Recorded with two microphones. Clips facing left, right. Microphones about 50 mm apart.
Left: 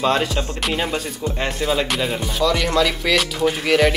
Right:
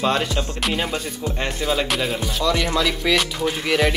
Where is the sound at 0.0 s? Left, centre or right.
Centre.